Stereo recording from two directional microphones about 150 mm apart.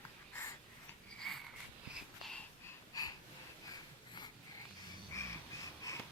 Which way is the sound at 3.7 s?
30° left (ahead or behind).